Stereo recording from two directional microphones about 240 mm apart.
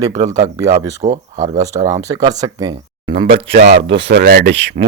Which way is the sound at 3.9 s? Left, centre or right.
Right.